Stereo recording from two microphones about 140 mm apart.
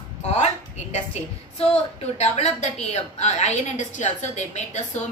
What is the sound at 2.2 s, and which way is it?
A woman's voice, 50° left (ahead or behind).